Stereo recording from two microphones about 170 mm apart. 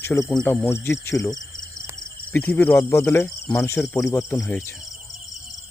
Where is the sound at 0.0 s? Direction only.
15° left (ahead or behind).